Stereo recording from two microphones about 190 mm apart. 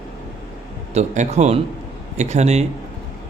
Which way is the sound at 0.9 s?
35° right (ahead or behind).